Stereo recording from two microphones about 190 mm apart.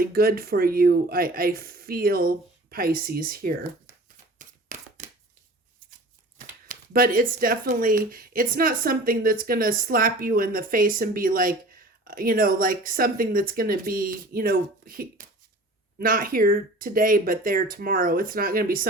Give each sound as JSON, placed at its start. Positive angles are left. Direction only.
{"t": 0.0, "sound": "speech", "side_deg": -50}
{"t": 4.4, "sound": "shuffling cards", "side_deg": -45}
{"t": 6.7, "sound": "speech", "side_deg": -50}